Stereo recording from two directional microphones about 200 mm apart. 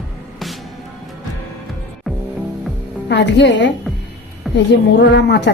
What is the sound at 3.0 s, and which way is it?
A woman's voice, 60° left (ahead or behind).